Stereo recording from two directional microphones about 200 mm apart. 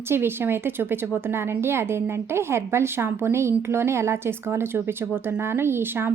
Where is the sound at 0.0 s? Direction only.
10° right (ahead or behind).